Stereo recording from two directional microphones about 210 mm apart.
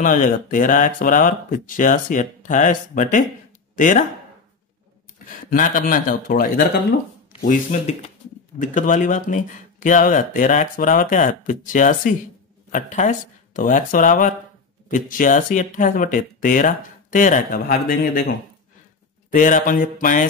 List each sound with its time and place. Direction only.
0.0 s speech: 40° left (ahead or behind)
5.3 s speech: 40° left (ahead or behind)
7.4 s speech: 35° left (ahead or behind)
19.3 s speech: 40° left (ahead or behind)